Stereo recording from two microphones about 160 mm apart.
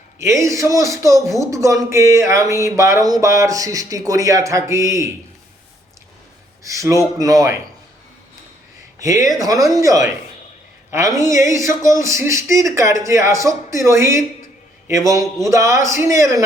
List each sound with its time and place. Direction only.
0.2 s speech: 20° right (ahead or behind)
6.6 s a man's voice: 20° right (ahead or behind)
9.0 s speech: 20° right (ahead or behind)
11.2 s speech: 20° right (ahead or behind)